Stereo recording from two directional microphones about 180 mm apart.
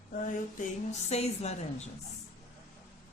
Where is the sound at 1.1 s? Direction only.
35° left (ahead or behind).